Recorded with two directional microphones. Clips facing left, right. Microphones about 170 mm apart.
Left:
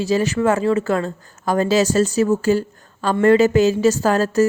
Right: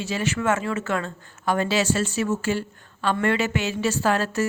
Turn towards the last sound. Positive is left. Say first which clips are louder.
# left 6 dB
turn(degrees=40)  # may be behind; listen again after turning